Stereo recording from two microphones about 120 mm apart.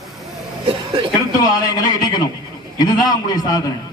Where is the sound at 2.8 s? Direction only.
35° left (ahead or behind).